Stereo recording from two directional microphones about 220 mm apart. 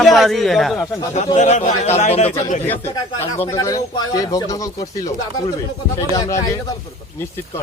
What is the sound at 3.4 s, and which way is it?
Speech, 15° left (ahead or behind).